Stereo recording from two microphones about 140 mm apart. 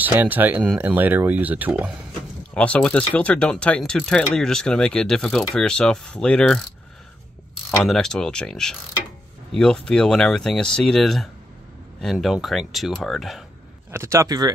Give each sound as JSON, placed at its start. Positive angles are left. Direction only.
{"t": 0.0, "sound": "speech", "side_deg": -15}
{"t": 2.5, "sound": "speech", "side_deg": 10}
{"t": 7.8, "sound": "speech", "side_deg": 5}
{"t": 13.9, "sound": "speech", "side_deg": -20}